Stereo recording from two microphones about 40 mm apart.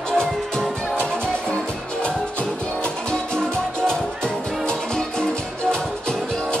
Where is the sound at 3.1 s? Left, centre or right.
Centre.